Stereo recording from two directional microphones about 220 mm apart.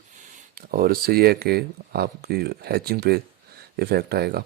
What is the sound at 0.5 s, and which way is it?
Speech, 40° right (ahead or behind).